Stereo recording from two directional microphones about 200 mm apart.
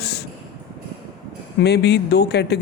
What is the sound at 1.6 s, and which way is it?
Speech, 55° left (ahead or behind).